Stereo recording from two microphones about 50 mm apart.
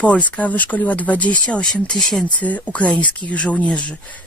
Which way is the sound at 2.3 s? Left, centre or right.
Left.